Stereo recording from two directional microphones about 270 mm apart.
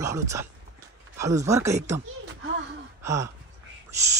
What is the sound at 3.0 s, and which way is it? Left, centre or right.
Speech, centre.